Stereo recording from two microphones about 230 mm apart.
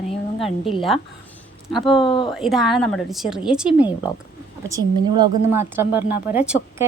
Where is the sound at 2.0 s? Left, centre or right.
Left.